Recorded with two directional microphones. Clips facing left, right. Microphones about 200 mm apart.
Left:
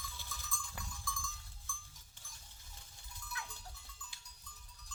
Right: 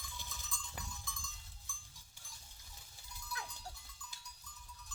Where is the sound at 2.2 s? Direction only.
10° right (ahead or behind).